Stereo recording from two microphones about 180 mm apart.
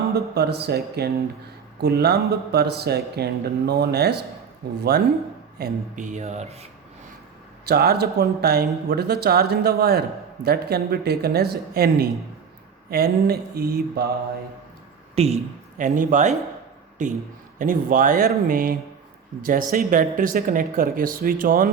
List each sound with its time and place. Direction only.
0.1 s speech: 65° right (ahead or behind)
5.5 s speech: 50° right (ahead or behind); by 6.7 s 35° right (ahead or behind)
7.6 s speech: 60° right (ahead or behind)
15.1 s speech: 35° right (ahead or behind)
15.8 s speech: 45° right (ahead or behind)